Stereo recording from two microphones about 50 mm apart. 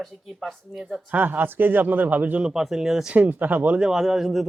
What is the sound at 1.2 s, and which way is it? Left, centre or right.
Speech, right.